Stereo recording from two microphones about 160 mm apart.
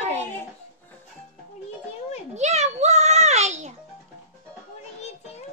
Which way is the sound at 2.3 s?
45° right (ahead or behind).